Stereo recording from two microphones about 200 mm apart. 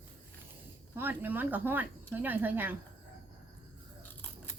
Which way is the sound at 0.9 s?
10° right (ahead or behind).